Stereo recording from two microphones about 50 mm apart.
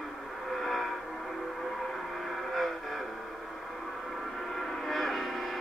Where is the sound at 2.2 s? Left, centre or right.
Centre.